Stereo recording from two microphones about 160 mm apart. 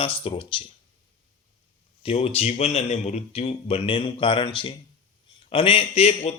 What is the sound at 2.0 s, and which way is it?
A man's voice, 40° left (ahead or behind).